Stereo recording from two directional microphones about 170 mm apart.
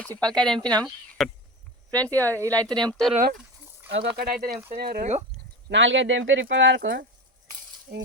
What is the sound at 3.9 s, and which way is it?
Speech, 90° right.